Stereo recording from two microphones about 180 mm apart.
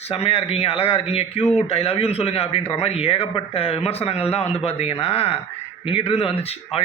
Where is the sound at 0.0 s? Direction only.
35° left (ahead or behind).